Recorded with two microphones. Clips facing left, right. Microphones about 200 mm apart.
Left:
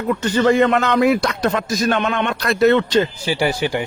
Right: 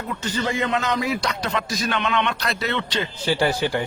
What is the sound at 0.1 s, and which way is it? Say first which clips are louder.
Speech: left 11 dB; 65° left (ahead or behind).